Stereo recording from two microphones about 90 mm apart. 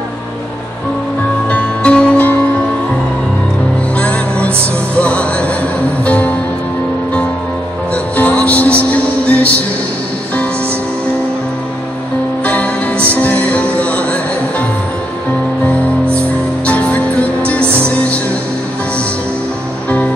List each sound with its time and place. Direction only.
1.5 s music: 10° left (ahead or behind)
3.9 s music: 15° left (ahead or behind)
7.9 s music: 15° left (ahead or behind)
12.4 s music: 15° left (ahead or behind)